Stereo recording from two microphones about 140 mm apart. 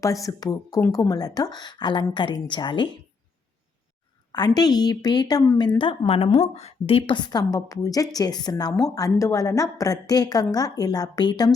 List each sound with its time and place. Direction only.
0.0 s a woman's voice: 25° left (ahead or behind)
4.3 s a woman's voice: 30° left (ahead or behind)
7.3 s a woman's voice: 25° left (ahead or behind)